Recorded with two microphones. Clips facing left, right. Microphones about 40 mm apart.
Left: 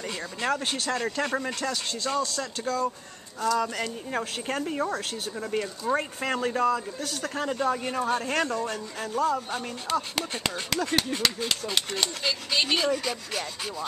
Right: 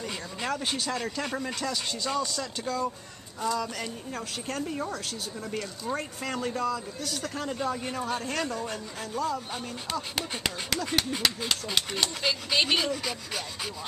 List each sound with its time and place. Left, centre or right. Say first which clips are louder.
0.0 s speech: left 3 dB; centre
3.5 s speech: left 4 dB; centre
7.1 s speech: left 3 dB; centre
8.6 s speech: left 3 dB; centre